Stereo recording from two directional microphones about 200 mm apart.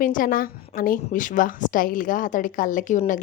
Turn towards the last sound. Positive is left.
turn(degrees=40)  # may be behind; listen again after turning